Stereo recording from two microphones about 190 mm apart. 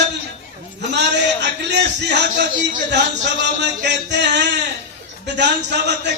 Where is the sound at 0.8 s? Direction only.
65° right (ahead or behind).